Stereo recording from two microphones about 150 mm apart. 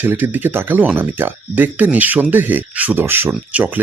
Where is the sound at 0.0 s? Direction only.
15° right (ahead or behind).